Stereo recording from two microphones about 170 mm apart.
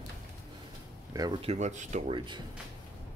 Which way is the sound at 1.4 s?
40° right (ahead or behind).